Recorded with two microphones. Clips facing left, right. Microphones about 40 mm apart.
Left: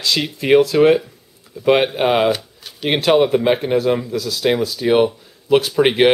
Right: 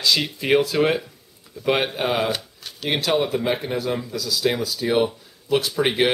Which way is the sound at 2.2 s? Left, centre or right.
Centre.